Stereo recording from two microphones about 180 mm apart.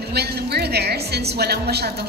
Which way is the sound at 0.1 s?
65° right (ahead or behind).